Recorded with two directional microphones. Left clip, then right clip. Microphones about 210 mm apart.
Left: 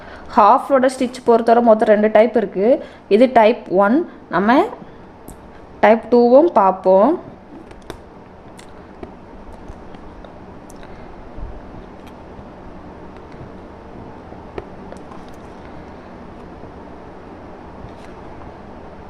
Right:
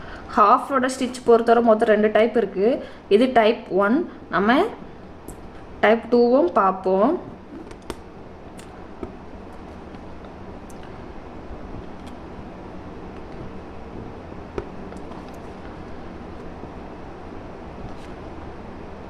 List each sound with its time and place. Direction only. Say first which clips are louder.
0.3 s a woman's voice: left 5 dB; 35° left (ahead or behind)
5.8 s a woman's voice: left 5 dB; 35° left (ahead or behind)